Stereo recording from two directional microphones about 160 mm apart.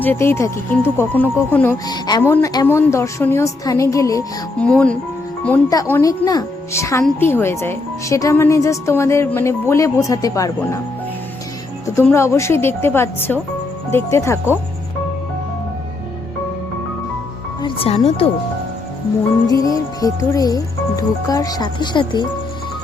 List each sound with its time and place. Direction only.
0.0 s speech: 15° left (ahead or behind)
1.9 s speech: 25° left (ahead or behind)
4.5 s speech: 5° left (ahead or behind)
5.7 s speech: 20° left (ahead or behind)
12.0 s speech: 15° left (ahead or behind)
17.6 s speech: 35° left (ahead or behind)
19.5 s speech: 20° left (ahead or behind)